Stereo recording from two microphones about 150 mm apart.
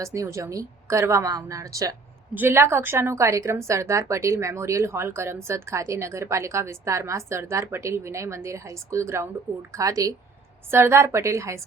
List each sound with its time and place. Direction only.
0.0 s a woman's voice: 20° right (ahead or behind)